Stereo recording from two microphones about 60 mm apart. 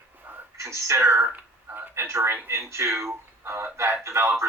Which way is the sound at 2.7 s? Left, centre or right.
Right.